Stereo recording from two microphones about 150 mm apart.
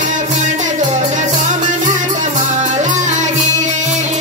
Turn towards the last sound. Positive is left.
turn(degrees=-55)  # may be behind; listen again after turning